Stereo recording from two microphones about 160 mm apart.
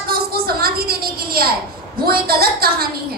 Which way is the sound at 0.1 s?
75° right (ahead or behind).